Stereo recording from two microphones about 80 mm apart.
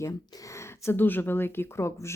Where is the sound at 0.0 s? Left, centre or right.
Left.